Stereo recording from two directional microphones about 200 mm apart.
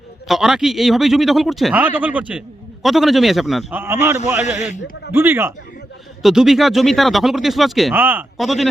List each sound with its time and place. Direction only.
0.3 s speech: centre (ahead or behind)
4.4 s speech: 35° left (ahead or behind)
5.1 s a man's voice: 10° right (ahead or behind)